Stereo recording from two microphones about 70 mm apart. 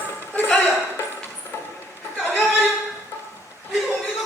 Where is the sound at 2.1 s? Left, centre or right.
Left.